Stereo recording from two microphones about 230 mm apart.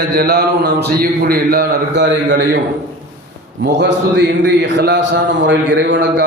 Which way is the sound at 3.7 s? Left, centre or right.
Right.